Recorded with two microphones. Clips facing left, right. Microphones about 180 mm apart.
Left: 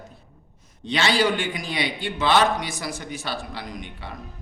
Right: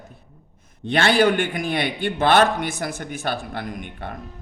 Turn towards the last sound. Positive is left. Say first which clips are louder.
# right 4 dB
turn(degrees=-55)  # may be behind; listen again after turning